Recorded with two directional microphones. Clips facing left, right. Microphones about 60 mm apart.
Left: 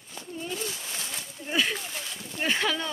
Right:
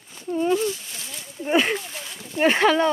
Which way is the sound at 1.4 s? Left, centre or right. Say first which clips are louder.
Right 7 dB; right.